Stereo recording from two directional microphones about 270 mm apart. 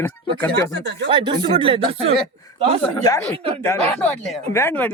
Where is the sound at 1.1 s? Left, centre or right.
Centre.